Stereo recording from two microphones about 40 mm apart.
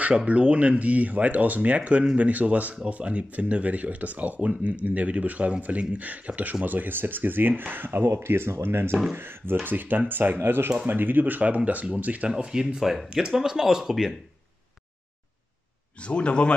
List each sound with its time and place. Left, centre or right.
0.3 s speech: right
9.1 s speech: right
12.3 s speech: right
12.5 s speech: centre
16.0 s a man's voice: left